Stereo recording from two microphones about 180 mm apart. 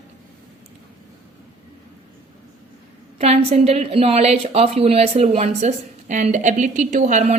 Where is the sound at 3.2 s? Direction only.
35° right (ahead or behind).